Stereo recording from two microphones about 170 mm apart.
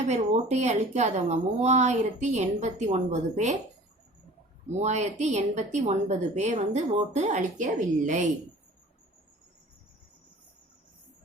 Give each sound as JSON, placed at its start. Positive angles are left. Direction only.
{"t": 0.1, "sound": "a woman's voice", "side_deg": -40}
{"t": 4.8, "sound": "a woman's voice", "side_deg": -40}